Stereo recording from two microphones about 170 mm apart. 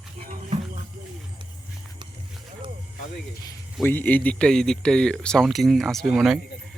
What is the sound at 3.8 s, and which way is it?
Speech, 10° left (ahead or behind).